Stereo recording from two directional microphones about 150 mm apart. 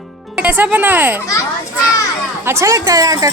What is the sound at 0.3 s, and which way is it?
Speech, 10° right (ahead or behind).